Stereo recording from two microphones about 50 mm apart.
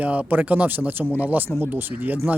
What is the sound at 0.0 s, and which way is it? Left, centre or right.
Speech, right.